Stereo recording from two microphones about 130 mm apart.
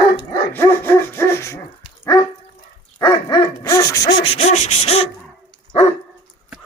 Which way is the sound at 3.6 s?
25° left (ahead or behind).